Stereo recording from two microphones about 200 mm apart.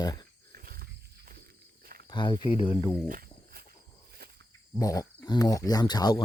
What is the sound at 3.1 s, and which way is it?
Insect, 45° right (ahead or behind).